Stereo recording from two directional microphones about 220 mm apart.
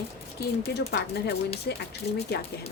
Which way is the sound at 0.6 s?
50° left (ahead or behind).